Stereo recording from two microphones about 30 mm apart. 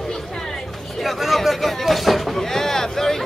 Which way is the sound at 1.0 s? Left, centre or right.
Centre.